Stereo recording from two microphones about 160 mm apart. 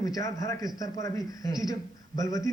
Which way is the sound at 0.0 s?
20° left (ahead or behind).